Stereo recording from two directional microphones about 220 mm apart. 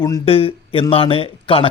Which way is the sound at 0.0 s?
20° left (ahead or behind).